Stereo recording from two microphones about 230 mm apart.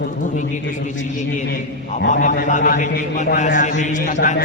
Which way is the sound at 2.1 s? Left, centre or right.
Left.